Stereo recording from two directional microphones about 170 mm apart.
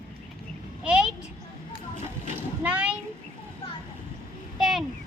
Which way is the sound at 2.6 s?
5° right (ahead or behind).